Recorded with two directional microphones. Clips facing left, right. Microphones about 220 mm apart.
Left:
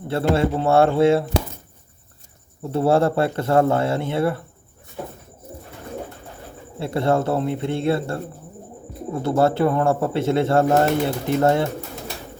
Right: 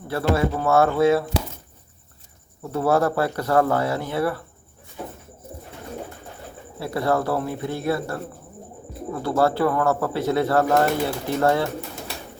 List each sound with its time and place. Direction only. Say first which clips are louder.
0.1 s speech: left 2 dB; 25° left (ahead or behind)
2.7 s speech: left 2 dB; 25° left (ahead or behind)
6.7 s speech: left 2 dB; 25° left (ahead or behind)